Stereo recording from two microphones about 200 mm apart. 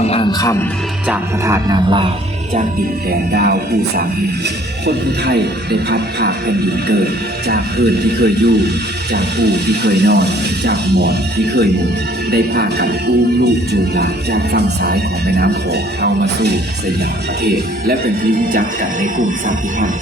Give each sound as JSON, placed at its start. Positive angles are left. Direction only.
{"t": 0.0, "sound": "music", "side_deg": 30}
{"t": 1.0, "sound": "speech", "side_deg": -10}
{"t": 3.1, "sound": "speech", "side_deg": -50}
{"t": 19.2, "sound": "music", "side_deg": -40}